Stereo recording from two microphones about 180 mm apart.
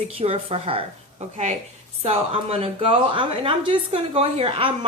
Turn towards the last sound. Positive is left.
turn(degrees=-30)  # may be behind; listen again after turning